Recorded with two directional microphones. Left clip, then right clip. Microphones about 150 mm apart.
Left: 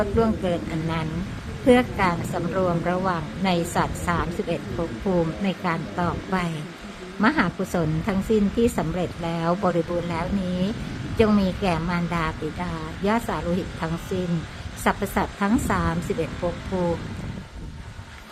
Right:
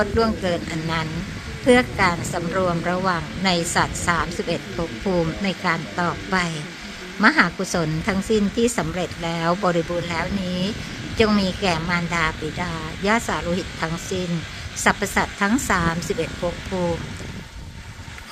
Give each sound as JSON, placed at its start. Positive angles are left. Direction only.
{"t": 0.0, "sound": "a woman's voice", "side_deg": 0}
{"t": 14.8, "sound": "a woman's voice", "side_deg": 0}
{"t": 16.7, "sound": "speech", "side_deg": -20}